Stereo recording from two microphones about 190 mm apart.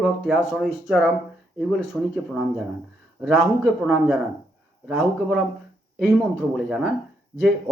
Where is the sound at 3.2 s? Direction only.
Centre (ahead or behind).